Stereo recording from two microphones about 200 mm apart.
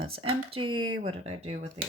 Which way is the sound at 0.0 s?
30° right (ahead or behind).